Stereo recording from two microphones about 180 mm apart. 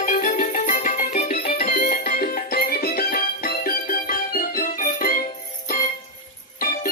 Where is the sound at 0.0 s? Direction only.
45° left (ahead or behind).